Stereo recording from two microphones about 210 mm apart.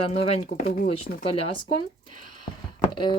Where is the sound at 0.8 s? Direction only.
25° left (ahead or behind).